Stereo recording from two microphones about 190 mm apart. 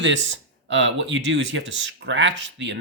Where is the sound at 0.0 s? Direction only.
75° right (ahead or behind).